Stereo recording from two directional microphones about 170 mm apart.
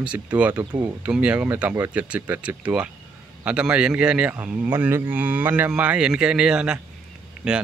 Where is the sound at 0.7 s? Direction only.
25° right (ahead or behind).